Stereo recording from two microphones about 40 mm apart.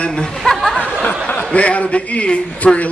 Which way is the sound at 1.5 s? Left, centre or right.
Left.